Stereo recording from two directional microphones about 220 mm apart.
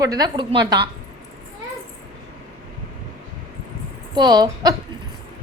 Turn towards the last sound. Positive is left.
turn(degrees=-20)  # may be behind; listen again after turning